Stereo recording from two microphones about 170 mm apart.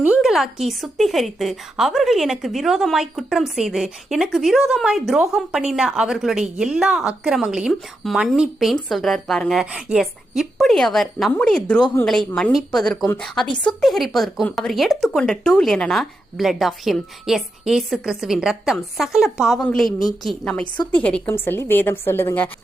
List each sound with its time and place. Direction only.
0.1 s a woman's voice: 5° right (ahead or behind); by 22.4 s 15° left (ahead or behind)